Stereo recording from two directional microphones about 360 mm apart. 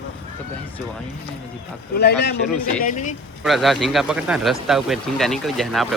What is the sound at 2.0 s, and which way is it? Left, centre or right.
Speech, left.